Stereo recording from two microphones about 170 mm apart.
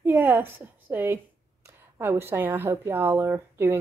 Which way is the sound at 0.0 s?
10° right (ahead or behind).